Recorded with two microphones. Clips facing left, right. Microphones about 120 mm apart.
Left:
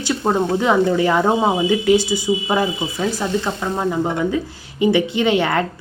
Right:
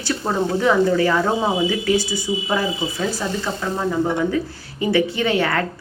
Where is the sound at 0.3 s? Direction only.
20° left (ahead or behind).